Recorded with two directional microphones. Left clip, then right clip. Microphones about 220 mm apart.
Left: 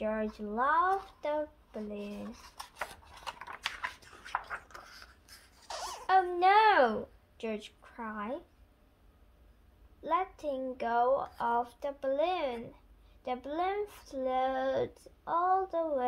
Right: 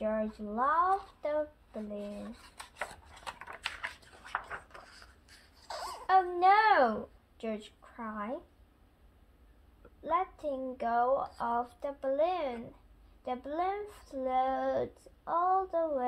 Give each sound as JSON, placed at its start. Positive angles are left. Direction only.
{"t": 0.0, "sound": "speech", "side_deg": 30}
{"t": 2.4, "sound": "a sound", "side_deg": 0}
{"t": 6.0, "sound": "a woman's voice", "side_deg": 25}
{"t": 10.0, "sound": "speech", "side_deg": 25}